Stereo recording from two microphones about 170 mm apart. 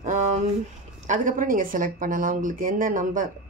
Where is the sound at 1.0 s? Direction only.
50° right (ahead or behind).